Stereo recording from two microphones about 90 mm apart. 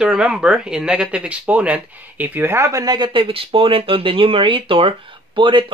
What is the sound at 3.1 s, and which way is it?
Speech, 80° right.